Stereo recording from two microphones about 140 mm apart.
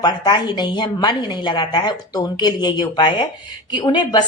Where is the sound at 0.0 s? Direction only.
30° left (ahead or behind).